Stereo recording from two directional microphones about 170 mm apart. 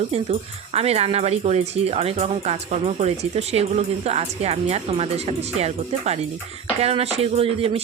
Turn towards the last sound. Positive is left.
turn(degrees=-35)  # may be behind; listen again after turning